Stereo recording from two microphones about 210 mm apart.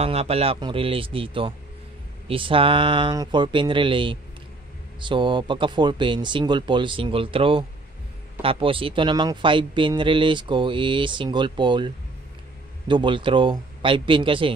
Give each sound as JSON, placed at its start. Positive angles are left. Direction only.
{"t": 0.0, "sound": "speech", "side_deg": -30}